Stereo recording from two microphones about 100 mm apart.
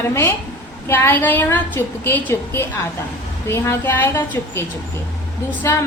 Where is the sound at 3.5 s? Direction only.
20° left (ahead or behind).